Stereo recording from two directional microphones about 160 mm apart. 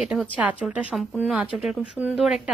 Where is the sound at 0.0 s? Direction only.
5° right (ahead or behind).